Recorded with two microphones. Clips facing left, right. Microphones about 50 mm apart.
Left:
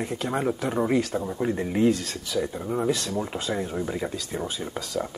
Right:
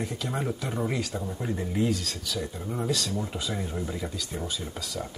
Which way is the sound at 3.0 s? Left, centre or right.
Left.